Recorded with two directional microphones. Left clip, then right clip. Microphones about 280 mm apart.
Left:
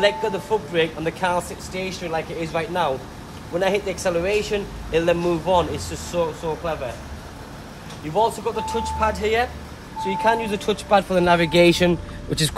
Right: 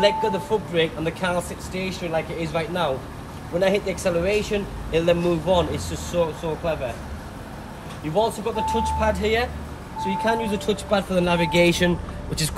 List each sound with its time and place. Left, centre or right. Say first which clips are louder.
0.0 s speech: even; centre
2.5 s speech: left 2 dB; centre
8.1 s speech: left 2 dB; centre; by 12.5 s left